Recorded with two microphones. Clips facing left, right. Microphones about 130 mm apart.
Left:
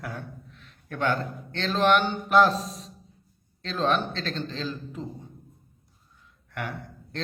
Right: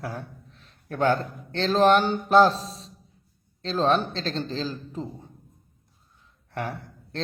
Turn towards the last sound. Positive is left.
turn(degrees=-35)  # may be behind; listen again after turning